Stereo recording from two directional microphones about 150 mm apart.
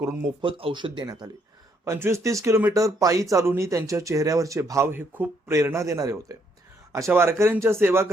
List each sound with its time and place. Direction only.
0.4 s speech: 35° right (ahead or behind)
1.8 s speech: 20° right (ahead or behind)